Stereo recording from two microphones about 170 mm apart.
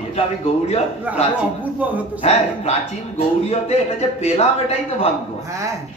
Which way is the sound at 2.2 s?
40° left (ahead or behind).